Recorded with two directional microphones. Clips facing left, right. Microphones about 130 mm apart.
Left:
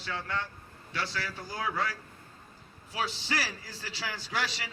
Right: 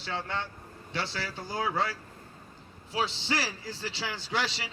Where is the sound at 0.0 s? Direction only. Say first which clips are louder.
Right 1 dB; 30° right (ahead or behind).